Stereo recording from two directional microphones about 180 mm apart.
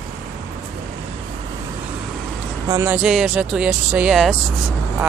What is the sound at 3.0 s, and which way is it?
Speech, centre (ahead or behind).